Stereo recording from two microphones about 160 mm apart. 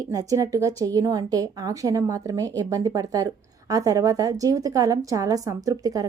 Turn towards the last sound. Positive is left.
turn(degrees=-20)  # may be behind; listen again after turning